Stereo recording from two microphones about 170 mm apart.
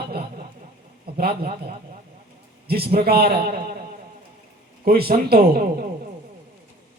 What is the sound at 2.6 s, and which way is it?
Speech, 65° right (ahead or behind).